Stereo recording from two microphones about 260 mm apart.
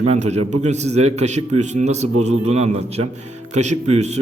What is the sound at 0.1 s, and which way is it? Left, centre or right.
A man's voice, right.